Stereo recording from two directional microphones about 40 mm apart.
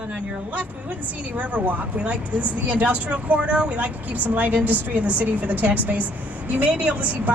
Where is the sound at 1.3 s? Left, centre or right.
Right.